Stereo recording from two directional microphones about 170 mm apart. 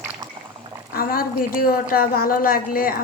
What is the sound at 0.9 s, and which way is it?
A woman's voice, 60° left (ahead or behind).